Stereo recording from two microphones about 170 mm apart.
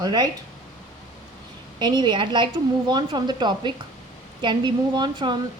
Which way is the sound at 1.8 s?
25° right (ahead or behind).